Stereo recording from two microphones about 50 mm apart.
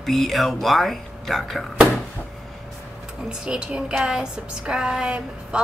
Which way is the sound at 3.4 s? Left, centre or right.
Centre.